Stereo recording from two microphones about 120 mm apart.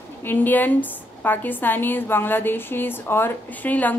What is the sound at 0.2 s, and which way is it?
A woman's voice, 15° left (ahead or behind).